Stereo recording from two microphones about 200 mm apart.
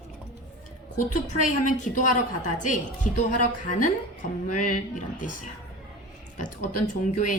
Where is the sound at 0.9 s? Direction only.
40° left (ahead or behind).